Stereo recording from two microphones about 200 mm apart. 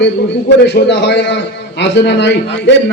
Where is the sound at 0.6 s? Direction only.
60° left (ahead or behind).